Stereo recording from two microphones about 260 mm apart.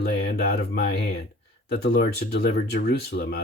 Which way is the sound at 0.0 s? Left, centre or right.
Left.